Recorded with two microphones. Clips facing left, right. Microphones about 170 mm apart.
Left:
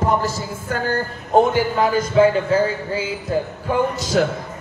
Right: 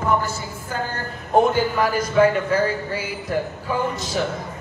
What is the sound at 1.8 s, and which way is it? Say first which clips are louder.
A woman's voice: left 3 dB; 25° left (ahead or behind).